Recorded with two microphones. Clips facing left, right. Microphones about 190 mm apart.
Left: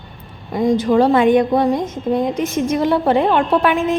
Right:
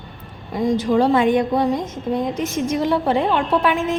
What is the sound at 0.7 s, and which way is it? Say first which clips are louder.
A woman's voice: left 2 dB; 55° left (ahead or behind).